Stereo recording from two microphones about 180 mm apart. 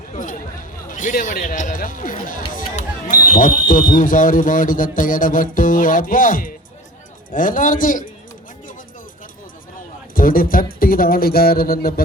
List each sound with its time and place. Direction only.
0.1 s chatter: 45° left (ahead or behind)
0.9 s speech: 45° left (ahead or behind)
10.2 s a man's voice: 50° left (ahead or behind)